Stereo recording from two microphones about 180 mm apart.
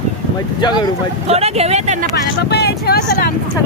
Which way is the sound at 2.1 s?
65° left (ahead or behind).